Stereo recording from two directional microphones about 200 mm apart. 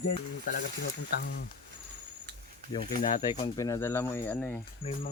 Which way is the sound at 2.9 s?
40° left (ahead or behind).